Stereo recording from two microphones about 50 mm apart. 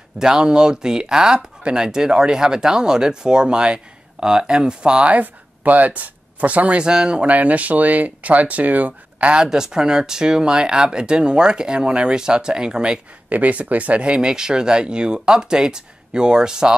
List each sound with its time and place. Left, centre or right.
0.2 s speech: centre
5.2 s speech: right
6.8 s speech: centre
7.2 s speech: right
9.3 s speech: centre
13.3 s speech: right; by 16.7 s centre